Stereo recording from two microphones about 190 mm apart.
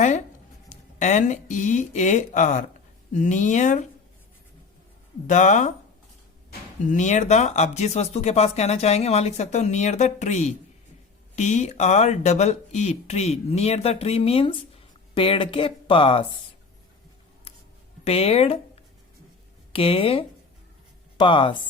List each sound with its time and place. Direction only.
0.7 s speech: 40° left (ahead or behind)
5.2 s speech: 40° left (ahead or behind)
6.9 s speech: 40° left (ahead or behind)
18.0 s speech: 30° left (ahead or behind)
19.7 s speech: 30° left (ahead or behind)